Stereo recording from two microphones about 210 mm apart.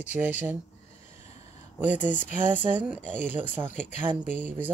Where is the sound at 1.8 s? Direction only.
10° right (ahead or behind).